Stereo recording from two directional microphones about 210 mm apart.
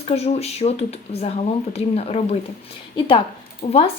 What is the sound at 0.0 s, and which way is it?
Speech, 30° left (ahead or behind).